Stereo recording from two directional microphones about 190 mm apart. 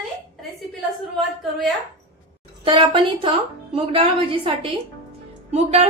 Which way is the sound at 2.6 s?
25° right (ahead or behind).